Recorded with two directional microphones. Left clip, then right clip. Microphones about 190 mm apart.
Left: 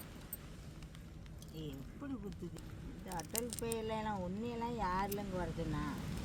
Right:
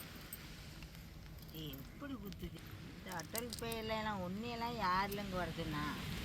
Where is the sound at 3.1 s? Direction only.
30° left (ahead or behind).